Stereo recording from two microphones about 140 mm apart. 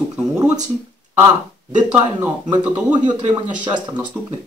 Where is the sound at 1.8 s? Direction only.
10° right (ahead or behind).